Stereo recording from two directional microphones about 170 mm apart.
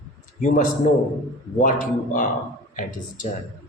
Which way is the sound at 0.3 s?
50° left (ahead or behind).